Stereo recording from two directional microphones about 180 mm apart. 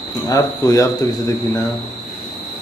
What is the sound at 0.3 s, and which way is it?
Speech, 15° left (ahead or behind).